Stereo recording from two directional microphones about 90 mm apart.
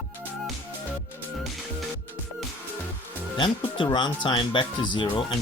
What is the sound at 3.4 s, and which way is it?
Speech, 60° left (ahead or behind).